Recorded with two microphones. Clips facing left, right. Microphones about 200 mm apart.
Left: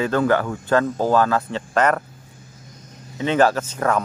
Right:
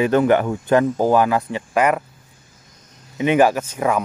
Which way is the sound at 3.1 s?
15° right (ahead or behind).